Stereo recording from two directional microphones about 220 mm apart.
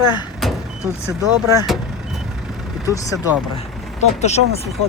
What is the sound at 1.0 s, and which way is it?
Speech, 15° right (ahead or behind).